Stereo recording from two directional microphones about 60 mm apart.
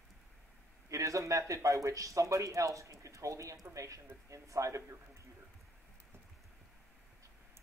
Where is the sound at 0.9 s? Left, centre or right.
Right.